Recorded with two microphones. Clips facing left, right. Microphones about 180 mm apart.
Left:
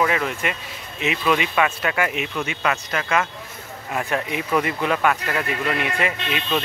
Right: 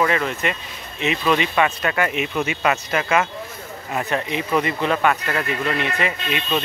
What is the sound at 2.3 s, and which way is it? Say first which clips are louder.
Speech: right 3 dB; 10° right (ahead or behind).